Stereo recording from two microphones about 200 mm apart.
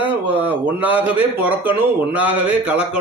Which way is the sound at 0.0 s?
10° right (ahead or behind).